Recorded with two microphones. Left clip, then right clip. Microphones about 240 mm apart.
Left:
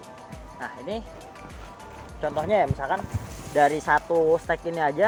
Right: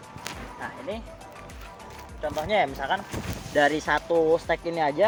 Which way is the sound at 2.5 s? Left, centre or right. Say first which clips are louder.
Even; centre.